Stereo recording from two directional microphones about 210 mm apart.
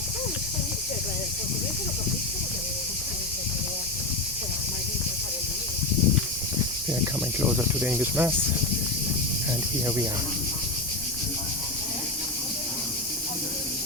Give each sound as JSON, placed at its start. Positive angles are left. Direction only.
{"t": 7.0, "sound": "speech", "side_deg": -10}